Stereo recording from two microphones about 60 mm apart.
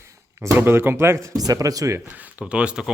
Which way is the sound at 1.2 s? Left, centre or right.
Right.